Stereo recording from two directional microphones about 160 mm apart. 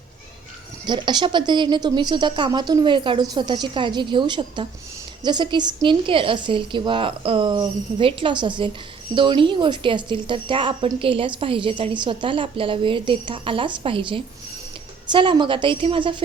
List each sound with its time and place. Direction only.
0.9 s a woman's voice: 30° right (ahead or behind)